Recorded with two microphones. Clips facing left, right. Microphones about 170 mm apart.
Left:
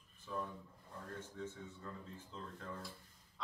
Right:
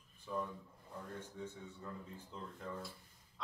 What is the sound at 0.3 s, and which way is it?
Speech, 15° right (ahead or behind).